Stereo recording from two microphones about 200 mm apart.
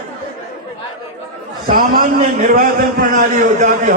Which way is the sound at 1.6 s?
40° right (ahead or behind).